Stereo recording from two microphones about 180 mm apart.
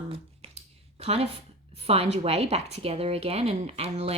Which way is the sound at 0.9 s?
35° right (ahead or behind).